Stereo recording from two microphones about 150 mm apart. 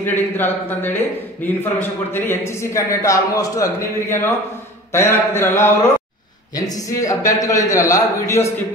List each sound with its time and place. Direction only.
0.0 s speech: 15° left (ahead or behind)